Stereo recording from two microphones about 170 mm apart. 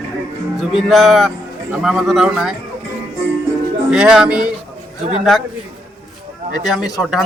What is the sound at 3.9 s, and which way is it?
Speech, 5° right (ahead or behind).